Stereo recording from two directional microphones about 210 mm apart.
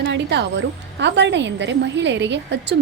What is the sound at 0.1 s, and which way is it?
A woman's voice, 55° right (ahead or behind).